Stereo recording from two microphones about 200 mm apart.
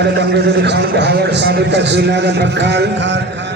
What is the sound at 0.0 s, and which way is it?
A man's voice, 60° right (ahead or behind).